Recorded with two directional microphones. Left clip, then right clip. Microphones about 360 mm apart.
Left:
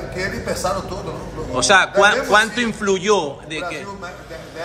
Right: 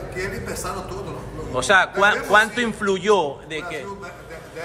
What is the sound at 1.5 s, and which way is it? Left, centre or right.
A man's voice, centre.